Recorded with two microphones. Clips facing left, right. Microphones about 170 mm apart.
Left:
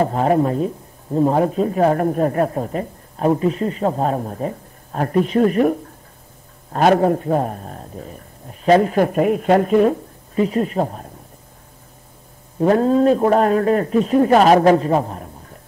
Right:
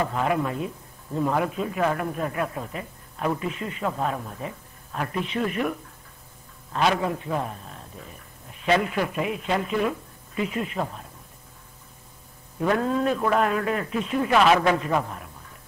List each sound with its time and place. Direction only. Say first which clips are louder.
0.0 s a man's voice: left 8 dB; 40° left (ahead or behind)
12.5 s speech: left 9 dB; 35° left (ahead or behind)